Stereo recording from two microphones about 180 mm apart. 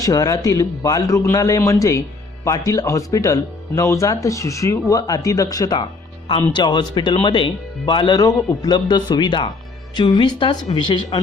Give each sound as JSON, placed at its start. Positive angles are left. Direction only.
{"t": 0.0, "sound": "a man's voice", "side_deg": 20}